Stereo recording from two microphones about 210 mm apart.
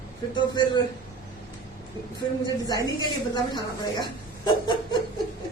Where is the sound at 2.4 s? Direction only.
20° left (ahead or behind).